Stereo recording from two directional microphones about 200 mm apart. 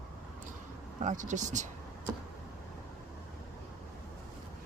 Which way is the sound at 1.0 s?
40° right (ahead or behind).